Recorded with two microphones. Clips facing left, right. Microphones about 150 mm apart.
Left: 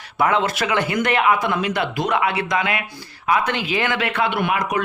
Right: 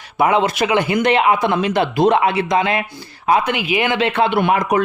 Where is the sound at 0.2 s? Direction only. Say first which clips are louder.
Right 4 dB; 15° right (ahead or behind).